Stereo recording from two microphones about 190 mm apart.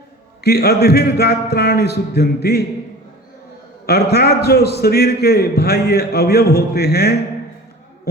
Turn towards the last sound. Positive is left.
turn(degrees=55)  # may be behind; listen again after turning